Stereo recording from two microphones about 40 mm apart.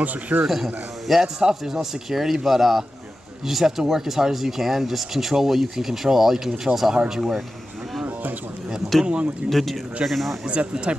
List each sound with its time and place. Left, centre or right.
0.3 s a man's voice: right
1.0 s speech: centre
9.0 s speech: right
9.5 s a man's voice: centre
10.4 s speech: right